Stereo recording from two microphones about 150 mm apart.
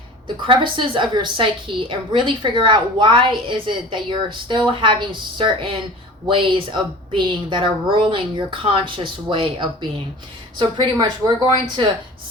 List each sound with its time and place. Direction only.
0.4 s a woman's voice: 35° right (ahead or behind)